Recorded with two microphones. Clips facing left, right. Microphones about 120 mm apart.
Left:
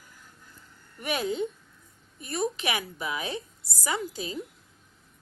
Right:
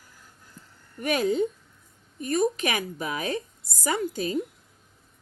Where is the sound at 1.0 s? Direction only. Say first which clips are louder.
Right 5 dB; 45° right (ahead or behind).